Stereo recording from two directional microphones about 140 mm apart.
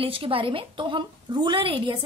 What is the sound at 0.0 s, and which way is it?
A woman's voice, 40° right (ahead or behind).